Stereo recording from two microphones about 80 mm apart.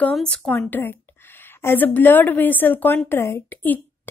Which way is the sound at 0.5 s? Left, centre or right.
Left.